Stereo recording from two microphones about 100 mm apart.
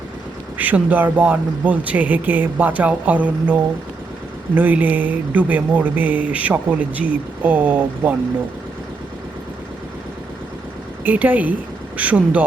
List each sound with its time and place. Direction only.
0.6 s speech: 15° right (ahead or behind)
11.0 s speech: 15° right (ahead or behind)